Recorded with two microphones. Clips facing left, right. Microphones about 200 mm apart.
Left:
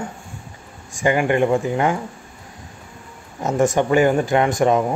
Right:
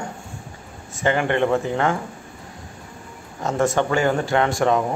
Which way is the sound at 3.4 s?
20° left (ahead or behind).